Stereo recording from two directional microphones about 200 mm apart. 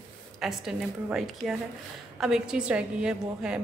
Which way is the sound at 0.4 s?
Centre (ahead or behind).